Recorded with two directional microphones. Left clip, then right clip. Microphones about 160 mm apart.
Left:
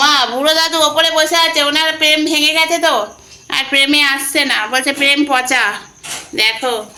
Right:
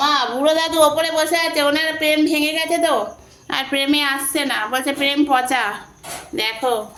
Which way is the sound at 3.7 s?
5° right (ahead or behind).